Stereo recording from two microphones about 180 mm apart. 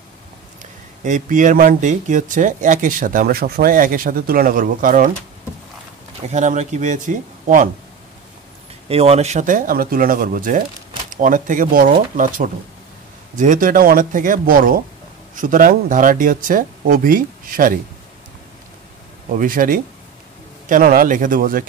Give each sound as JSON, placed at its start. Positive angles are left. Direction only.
{"t": 0.6, "sound": "speech", "side_deg": -45}
{"t": 6.2, "sound": "speech", "side_deg": -40}
{"t": 8.8, "sound": "speech", "side_deg": -35}
{"t": 19.3, "sound": "speech", "side_deg": -50}